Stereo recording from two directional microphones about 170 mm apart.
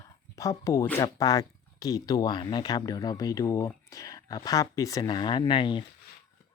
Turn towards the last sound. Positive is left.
turn(degrees=30)  # may be behind; listen again after turning